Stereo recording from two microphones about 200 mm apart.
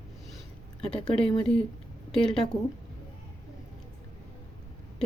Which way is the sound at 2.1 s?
5° left (ahead or behind).